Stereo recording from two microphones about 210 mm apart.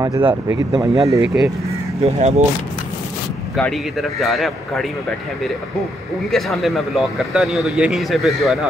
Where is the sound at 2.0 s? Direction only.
30° right (ahead or behind).